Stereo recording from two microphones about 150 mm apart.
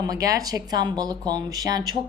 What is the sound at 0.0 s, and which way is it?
A woman's voice, 25° right (ahead or behind).